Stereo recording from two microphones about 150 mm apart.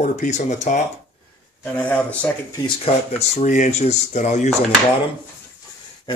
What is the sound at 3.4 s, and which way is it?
Speech, 50° left (ahead or behind).